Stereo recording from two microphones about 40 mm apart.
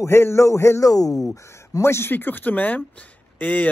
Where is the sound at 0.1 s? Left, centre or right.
Left.